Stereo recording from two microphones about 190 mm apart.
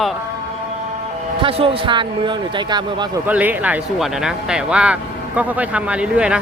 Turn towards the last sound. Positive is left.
turn(degrees=-5)  # may be behind; listen again after turning